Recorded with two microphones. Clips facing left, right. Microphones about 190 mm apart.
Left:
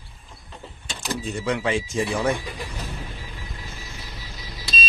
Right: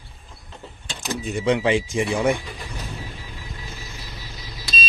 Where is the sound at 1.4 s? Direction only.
20° right (ahead or behind).